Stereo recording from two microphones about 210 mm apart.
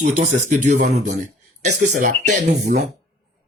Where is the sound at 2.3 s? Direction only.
50° right (ahead or behind).